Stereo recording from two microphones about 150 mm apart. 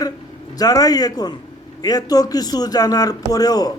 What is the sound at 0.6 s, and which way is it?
A man's voice, 25° left (ahead or behind).